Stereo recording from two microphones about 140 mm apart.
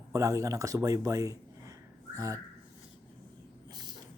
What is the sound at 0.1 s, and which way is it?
Speech, 20° right (ahead or behind).